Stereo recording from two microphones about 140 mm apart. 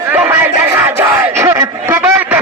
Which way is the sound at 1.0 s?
20° right (ahead or behind).